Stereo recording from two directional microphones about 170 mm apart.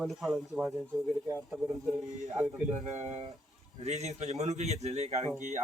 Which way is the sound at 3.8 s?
40° right (ahead or behind).